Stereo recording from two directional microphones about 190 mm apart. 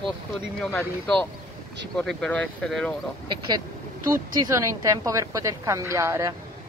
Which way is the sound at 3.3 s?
25° right (ahead or behind).